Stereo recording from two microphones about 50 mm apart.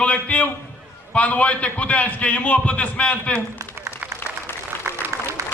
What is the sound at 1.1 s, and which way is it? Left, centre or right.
A man's voice, left.